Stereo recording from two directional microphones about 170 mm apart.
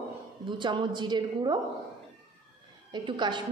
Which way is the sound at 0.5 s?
30° right (ahead or behind).